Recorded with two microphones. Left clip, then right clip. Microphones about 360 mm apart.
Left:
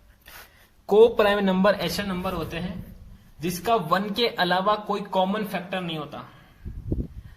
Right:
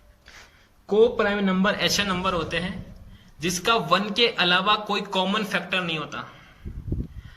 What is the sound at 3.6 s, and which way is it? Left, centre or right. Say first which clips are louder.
Speech: right 1 dB; left.